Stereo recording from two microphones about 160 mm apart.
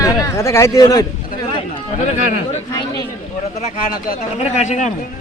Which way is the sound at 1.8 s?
45° left (ahead or behind).